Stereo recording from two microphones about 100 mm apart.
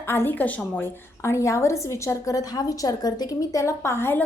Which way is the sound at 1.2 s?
30° left (ahead or behind).